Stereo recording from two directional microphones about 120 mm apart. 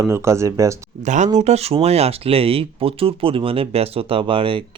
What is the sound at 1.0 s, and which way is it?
Speech, 85° right.